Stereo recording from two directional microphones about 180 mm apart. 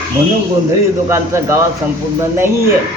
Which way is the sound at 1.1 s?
15° right (ahead or behind).